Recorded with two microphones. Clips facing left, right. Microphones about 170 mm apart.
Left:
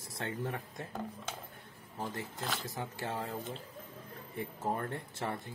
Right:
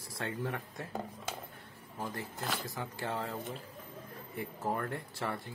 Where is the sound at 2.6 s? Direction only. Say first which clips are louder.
Even; 20° left (ahead or behind).